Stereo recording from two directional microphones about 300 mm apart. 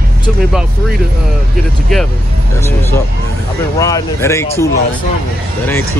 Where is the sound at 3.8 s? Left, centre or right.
Centre.